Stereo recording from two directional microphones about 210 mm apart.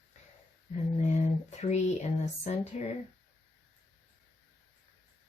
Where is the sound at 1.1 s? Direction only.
30° left (ahead or behind).